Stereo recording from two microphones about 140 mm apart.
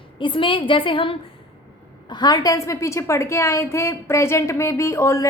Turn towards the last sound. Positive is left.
turn(degrees=20)  # may be behind; listen again after turning